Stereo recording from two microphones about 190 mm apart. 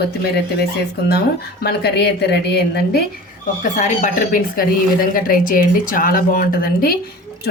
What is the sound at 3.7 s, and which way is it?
A woman's voice, 40° left (ahead or behind).